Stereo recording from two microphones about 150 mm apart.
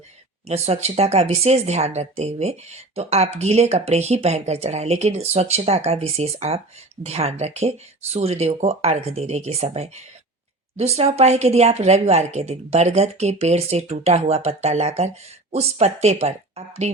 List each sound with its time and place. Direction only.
0.4 s speech: 45° right (ahead or behind)